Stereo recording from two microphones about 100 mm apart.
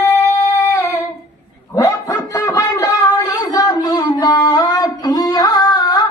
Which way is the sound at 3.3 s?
35° left (ahead or behind).